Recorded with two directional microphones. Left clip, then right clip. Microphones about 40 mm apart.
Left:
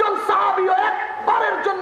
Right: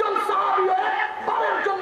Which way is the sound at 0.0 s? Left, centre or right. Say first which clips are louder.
Left 4 dB; left.